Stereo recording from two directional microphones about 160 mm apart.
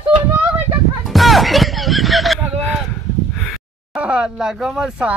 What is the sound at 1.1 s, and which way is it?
Music, centre (ahead or behind).